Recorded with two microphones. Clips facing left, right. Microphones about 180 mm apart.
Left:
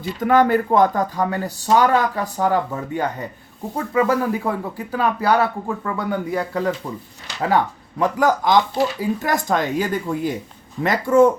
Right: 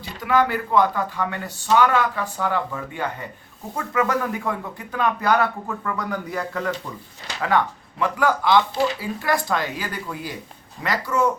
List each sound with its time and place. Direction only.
0.0 s speech: 50° left (ahead or behind)